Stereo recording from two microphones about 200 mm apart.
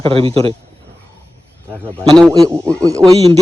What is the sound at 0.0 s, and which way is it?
Speech, 30° right (ahead or behind).